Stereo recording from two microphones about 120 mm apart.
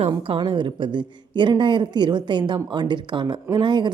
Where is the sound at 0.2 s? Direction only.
45° right (ahead or behind).